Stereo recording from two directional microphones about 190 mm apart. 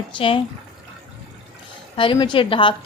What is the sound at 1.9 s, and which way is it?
Speech, 25° left (ahead or behind).